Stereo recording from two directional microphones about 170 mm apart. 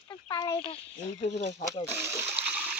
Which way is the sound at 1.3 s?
40° left (ahead or behind).